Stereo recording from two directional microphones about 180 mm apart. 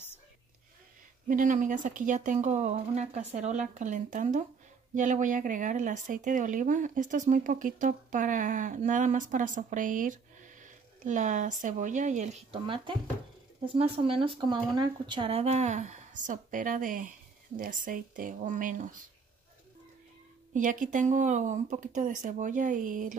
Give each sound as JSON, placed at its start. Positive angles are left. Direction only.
{"t": 1.2, "sound": "speech", "side_deg": -45}
{"t": 20.5, "sound": "speech", "side_deg": -45}